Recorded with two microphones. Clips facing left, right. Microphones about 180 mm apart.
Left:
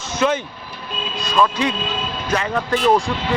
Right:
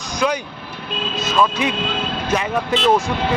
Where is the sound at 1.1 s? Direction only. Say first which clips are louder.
Even; 20° right (ahead or behind).